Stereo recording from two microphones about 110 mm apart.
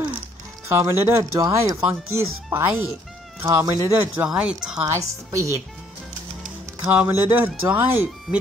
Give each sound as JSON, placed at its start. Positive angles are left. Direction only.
{"t": 0.7, "sound": "speech", "side_deg": -25}
{"t": 4.3, "sound": "speech", "side_deg": -10}
{"t": 4.8, "sound": "speech", "side_deg": -30}
{"t": 6.6, "sound": "music", "side_deg": -20}
{"t": 7.0, "sound": "speech", "side_deg": -20}